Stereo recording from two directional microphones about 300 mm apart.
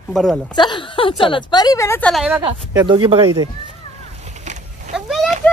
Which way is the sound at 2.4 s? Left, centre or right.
Centre.